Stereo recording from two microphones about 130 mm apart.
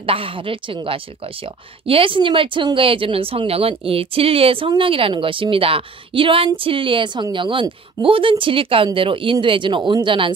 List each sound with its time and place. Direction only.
0.0 s speech: 45° right (ahead or behind)